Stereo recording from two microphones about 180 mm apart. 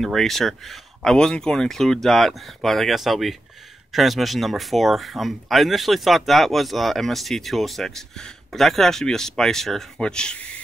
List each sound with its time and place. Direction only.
0.0 s speech: centre (ahead or behind)